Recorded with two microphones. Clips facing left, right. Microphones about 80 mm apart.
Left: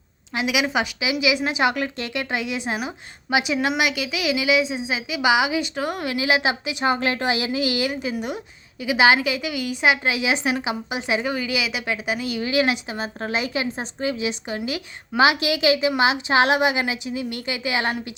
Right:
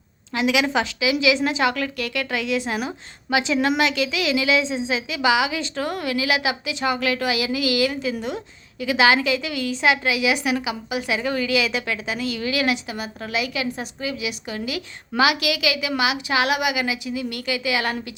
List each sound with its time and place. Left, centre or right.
0.3 s a woman's voice: centre